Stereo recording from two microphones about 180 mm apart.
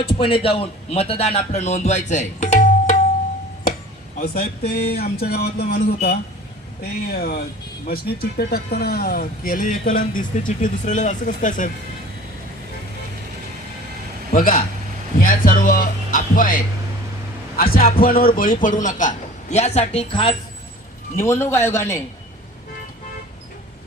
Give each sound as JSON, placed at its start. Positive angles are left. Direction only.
{"t": 0.1, "sound": "a man's voice", "side_deg": 30}
{"t": 4.2, "sound": "speech", "side_deg": 55}
{"t": 14.3, "sound": "speech", "side_deg": 50}
{"t": 15.2, "sound": "music", "side_deg": 50}
{"t": 17.6, "sound": "speech", "side_deg": 55}
{"t": 21.2, "sound": "a man's voice", "side_deg": 15}